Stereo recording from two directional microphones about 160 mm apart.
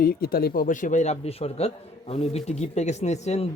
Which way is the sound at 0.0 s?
70° left (ahead or behind).